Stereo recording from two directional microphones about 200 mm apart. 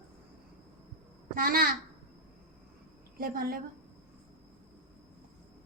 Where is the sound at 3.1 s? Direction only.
45° right (ahead or behind).